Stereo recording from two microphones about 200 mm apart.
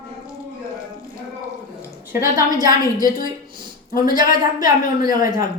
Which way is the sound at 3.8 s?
45° left (ahead or behind).